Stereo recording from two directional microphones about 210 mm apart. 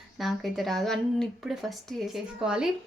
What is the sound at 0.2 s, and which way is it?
Speech, centre (ahead or behind).